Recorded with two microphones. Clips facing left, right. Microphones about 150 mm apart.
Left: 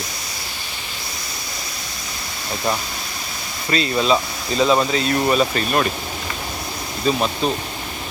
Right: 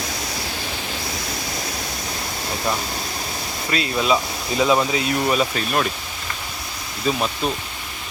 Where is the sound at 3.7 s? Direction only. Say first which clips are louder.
Left 2 dB; 5° right (ahead or behind).